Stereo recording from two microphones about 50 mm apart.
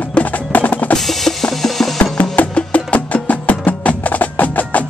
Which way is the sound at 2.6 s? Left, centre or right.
Left.